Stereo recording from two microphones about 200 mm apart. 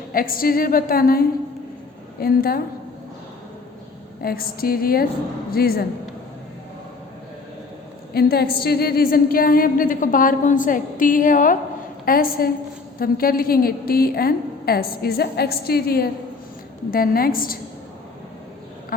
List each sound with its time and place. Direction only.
0.1 s a woman's voice: 45° left (ahead or behind)
4.2 s a woman's voice: 50° left (ahead or behind)
8.1 s a woman's voice: 50° left (ahead or behind)